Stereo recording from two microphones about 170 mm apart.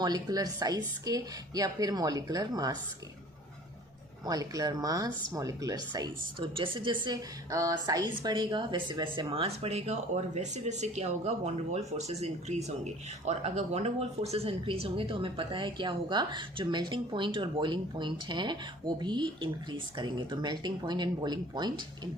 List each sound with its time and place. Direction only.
0.0 s a woman's voice: 20° right (ahead or behind)
4.3 s a woman's voice: 20° right (ahead or behind)